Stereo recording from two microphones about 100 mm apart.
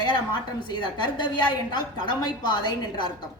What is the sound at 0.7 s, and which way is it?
A woman's voice, 50° left (ahead or behind).